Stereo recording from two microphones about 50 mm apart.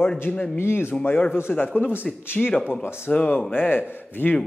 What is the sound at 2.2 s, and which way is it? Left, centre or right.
Speech, left.